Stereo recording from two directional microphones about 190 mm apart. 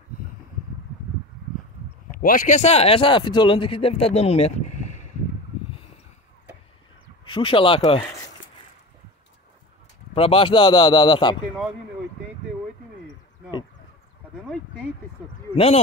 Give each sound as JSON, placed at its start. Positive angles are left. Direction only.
{"t": 2.1, "sound": "speech", "side_deg": 45}
{"t": 7.2, "sound": "speech", "side_deg": 25}
{"t": 10.1, "sound": "speech", "side_deg": 30}
{"t": 15.5, "sound": "speech", "side_deg": 30}